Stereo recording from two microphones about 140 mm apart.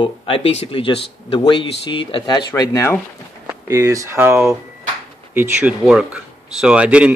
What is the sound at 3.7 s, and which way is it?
Speech, 20° right (ahead or behind).